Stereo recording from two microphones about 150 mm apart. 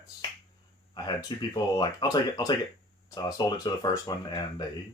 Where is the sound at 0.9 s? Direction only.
30° left (ahead or behind).